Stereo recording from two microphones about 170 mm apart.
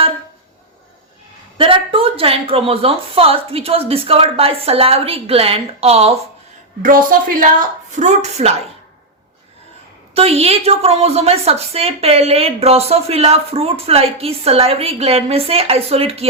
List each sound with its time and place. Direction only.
1.5 s a woman's voice: 30° right (ahead or behind)
6.8 s a woman's voice: 55° right (ahead or behind)
7.9 s a woman's voice: 45° right (ahead or behind)
10.2 s a woman's voice: 35° right (ahead or behind)